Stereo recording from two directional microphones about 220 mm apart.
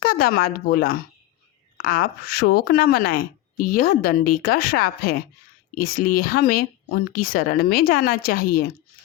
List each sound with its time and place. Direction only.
0.0 s a woman's voice: 40° left (ahead or behind)